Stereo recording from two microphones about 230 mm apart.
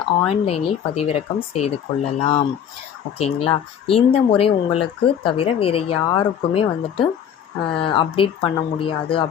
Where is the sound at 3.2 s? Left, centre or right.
Left.